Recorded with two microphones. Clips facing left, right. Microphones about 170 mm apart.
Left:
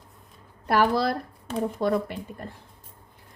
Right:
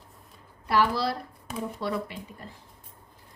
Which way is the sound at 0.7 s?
50° left (ahead or behind).